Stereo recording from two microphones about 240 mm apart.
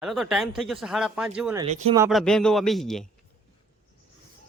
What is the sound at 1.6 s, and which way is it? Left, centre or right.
Speech, right.